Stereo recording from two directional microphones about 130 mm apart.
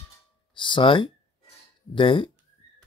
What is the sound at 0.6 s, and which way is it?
Speech, 40° left (ahead or behind).